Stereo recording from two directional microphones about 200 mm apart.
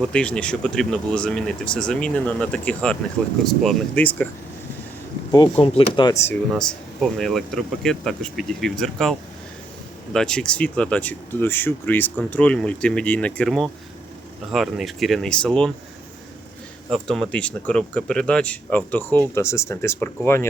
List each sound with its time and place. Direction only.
0.0 s speech: 5° left (ahead or behind)
5.5 s speech: 30° left (ahead or behind)
6.5 s speech: centre (ahead or behind)
16.9 s speech: 5° left (ahead or behind)